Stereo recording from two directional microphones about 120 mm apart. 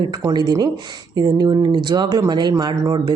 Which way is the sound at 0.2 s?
35° right (ahead or behind).